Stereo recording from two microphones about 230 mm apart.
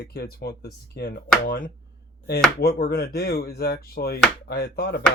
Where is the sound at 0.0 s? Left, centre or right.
Left.